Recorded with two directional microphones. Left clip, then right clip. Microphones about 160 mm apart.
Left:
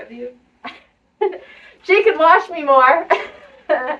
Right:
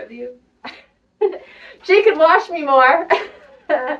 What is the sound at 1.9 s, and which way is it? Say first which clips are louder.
A woman's voice: even; 15° left (ahead or behind).